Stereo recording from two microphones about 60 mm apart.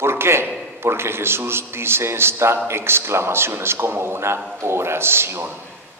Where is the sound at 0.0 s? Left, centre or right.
Right.